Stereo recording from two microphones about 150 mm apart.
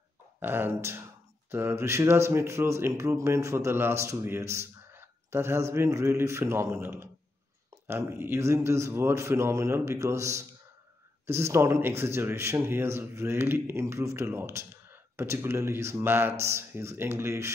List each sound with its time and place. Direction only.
0.4 s a man's voice: 15° right (ahead or behind)